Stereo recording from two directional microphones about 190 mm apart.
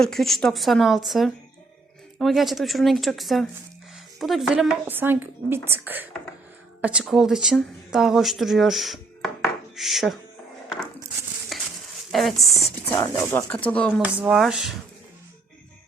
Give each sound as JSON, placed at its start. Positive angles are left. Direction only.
{"t": 0.0, "sound": "a woman's voice", "side_deg": 0}
{"t": 11.5, "sound": "a sound", "side_deg": 0}
{"t": 12.1, "sound": "a woman's voice", "side_deg": 0}
{"t": 12.8, "sound": "speech", "side_deg": 15}
{"t": 14.0, "sound": "a woman's voice", "side_deg": -10}